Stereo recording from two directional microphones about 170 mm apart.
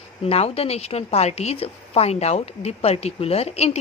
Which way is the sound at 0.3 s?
35° left (ahead or behind).